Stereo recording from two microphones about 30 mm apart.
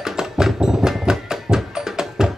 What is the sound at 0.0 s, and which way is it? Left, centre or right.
Music, centre.